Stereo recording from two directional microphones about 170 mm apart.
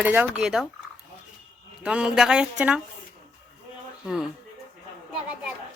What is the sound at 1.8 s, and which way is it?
Speech, 5° right (ahead or behind).